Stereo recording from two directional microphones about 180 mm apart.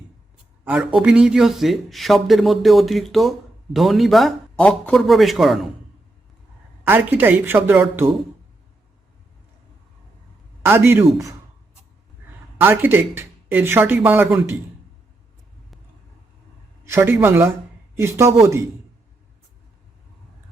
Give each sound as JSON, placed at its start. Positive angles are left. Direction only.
{"t": 0.6, "sound": "speech", "side_deg": -5}
{"t": 6.8, "sound": "speech", "side_deg": -10}
{"t": 10.6, "sound": "a man's voice", "side_deg": -15}
{"t": 12.5, "sound": "speech", "side_deg": -10}
{"t": 16.8, "sound": "speech", "side_deg": -15}